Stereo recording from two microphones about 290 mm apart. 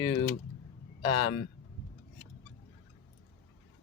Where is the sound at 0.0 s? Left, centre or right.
Centre.